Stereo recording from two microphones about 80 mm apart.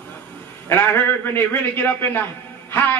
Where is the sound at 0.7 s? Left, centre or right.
Left.